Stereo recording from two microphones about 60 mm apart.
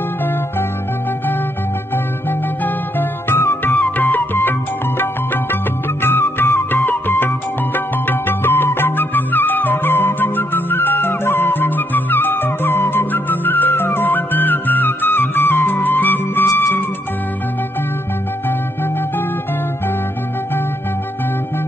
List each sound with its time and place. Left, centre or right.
2.6 s music: left
3.7 s music: left